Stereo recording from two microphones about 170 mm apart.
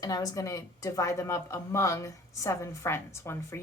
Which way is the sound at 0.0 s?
20° left (ahead or behind).